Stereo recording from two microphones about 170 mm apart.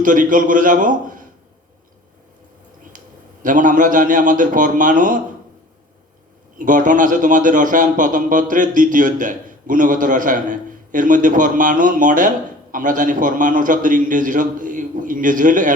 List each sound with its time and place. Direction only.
0.0 s a man's voice: 50° right (ahead or behind)
3.4 s a man's voice: 50° right (ahead or behind)
6.6 s a man's voice: 50° right (ahead or behind)